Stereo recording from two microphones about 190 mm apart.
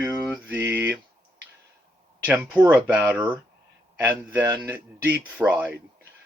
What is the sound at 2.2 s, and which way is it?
A man's voice, 10° right (ahead or behind).